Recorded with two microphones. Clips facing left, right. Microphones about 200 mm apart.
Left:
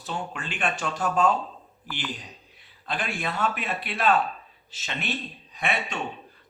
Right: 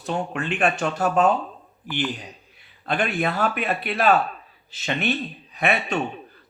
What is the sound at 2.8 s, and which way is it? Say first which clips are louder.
Speech: right 7 dB; 65° right (ahead or behind).